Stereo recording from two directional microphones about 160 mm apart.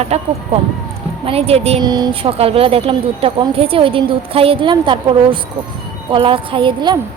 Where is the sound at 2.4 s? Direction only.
35° right (ahead or behind).